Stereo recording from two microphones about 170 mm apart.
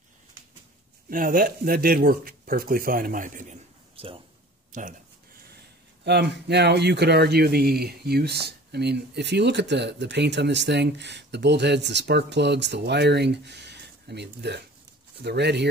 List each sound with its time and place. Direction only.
1.1 s speech: 55° right (ahead or behind)
3.9 s a sound: 35° right (ahead or behind)
4.7 s speech: 45° right (ahead or behind)
6.3 s speech: 85° right